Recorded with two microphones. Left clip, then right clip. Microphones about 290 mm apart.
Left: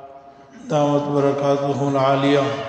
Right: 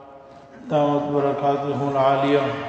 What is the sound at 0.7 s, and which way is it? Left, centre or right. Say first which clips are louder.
A man's voice: left 1 dB; left.